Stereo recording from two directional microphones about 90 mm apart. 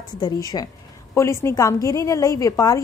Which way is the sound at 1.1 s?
30° left (ahead or behind).